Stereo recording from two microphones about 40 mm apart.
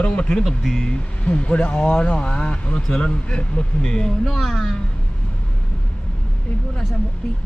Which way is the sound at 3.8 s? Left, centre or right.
Centre.